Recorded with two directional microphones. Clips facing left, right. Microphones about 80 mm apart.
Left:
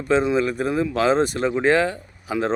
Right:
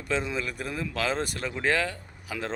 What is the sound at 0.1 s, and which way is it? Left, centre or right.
Speech, left.